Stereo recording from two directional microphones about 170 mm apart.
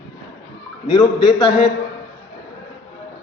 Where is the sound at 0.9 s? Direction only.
20° left (ahead or behind).